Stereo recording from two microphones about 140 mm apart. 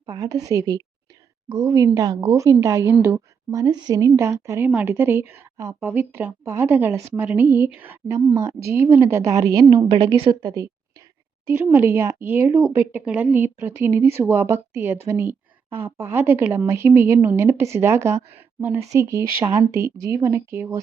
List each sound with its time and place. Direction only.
0.0 s a woman's voice: 25° right (ahead or behind)